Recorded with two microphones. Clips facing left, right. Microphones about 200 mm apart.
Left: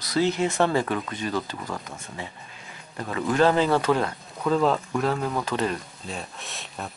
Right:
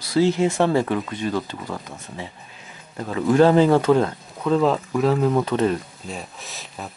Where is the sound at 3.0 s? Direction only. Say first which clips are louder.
Right 3 dB; 5° right (ahead or behind).